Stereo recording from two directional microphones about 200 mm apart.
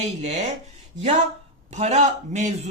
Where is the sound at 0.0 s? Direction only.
35° right (ahead or behind).